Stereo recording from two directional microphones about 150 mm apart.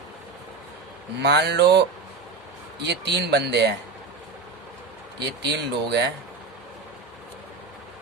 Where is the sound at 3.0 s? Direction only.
90° right.